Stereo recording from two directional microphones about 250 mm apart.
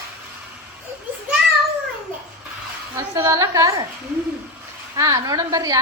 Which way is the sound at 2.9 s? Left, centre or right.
Centre.